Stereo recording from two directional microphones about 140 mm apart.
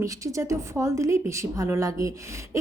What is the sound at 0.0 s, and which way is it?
A woman's voice, 25° right (ahead or behind).